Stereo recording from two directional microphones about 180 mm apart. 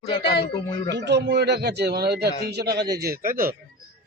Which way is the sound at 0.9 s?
75° right (ahead or behind).